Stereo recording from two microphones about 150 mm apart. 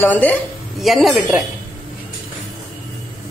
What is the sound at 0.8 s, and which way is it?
Speech, centre (ahead or behind).